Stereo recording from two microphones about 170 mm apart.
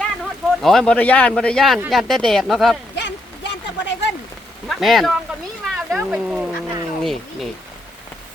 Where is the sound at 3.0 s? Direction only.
90° left.